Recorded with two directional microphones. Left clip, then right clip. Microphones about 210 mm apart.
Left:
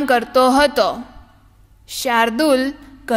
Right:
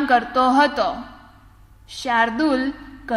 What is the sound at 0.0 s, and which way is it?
A woman's voice, 40° left (ahead or behind).